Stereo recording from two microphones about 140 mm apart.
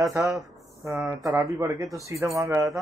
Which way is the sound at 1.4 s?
25° right (ahead or behind).